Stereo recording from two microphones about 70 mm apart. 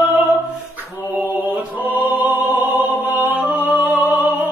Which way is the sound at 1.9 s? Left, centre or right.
Right.